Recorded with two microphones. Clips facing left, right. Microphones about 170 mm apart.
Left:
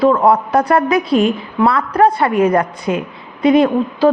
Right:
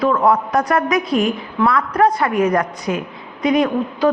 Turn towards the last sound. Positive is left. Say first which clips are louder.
# left 4 dB
turn(degrees=30)  # may be behind; listen again after turning